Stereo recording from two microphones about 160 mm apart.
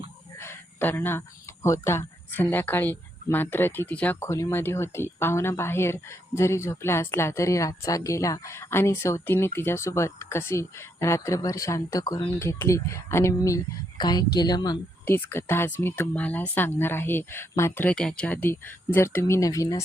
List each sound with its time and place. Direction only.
0.3 s a sound: 15° left (ahead or behind)
1.6 s a woman's voice: 15° left (ahead or behind)
15.0 s speech: 15° left (ahead or behind)